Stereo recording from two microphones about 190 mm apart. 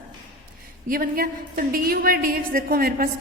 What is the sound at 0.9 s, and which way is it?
A woman's voice, 45° right (ahead or behind).